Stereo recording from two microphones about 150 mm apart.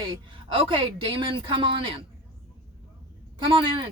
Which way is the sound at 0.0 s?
35° right (ahead or behind).